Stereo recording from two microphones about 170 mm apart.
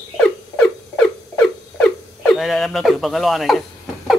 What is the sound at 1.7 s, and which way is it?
Speech, centre (ahead or behind).